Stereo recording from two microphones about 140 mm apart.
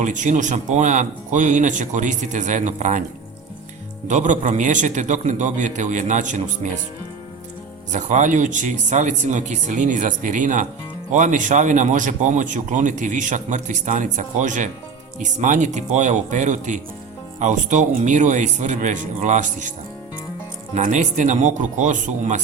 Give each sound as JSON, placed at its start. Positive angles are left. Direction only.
{"t": 0.0, "sound": "speech", "side_deg": -65}
{"t": 4.1, "sound": "speech", "side_deg": -60}
{"t": 7.9, "sound": "speech", "side_deg": -60}
{"t": 20.7, "sound": "speech", "side_deg": -60}